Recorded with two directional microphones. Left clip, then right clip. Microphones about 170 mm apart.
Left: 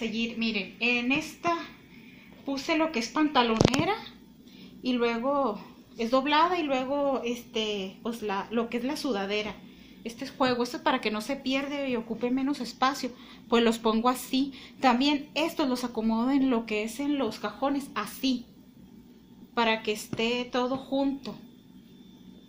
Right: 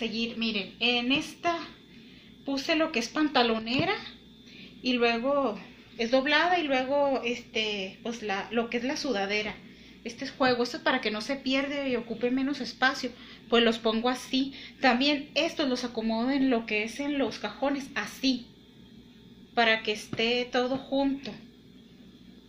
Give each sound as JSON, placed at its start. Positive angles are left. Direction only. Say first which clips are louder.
{"t": 0.2, "sound": "a woman's voice", "louder": "even", "side_deg": 5}
{"t": 0.7, "sound": "speech", "louder": "right 1 dB", "side_deg": 35}
{"t": 2.5, "sound": "a woman's voice", "louder": "even", "side_deg": 40}
{"t": 19.5, "sound": "a woman's voice", "louder": "right 2 dB", "side_deg": 50}